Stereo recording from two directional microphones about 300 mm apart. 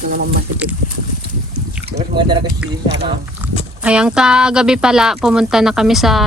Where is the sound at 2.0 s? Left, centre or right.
Centre.